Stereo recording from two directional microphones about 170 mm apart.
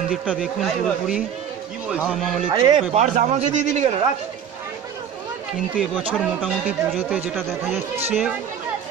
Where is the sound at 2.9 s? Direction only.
45° right (ahead or behind).